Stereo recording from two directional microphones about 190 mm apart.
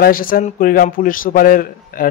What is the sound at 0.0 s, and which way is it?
A man's voice, 50° left (ahead or behind).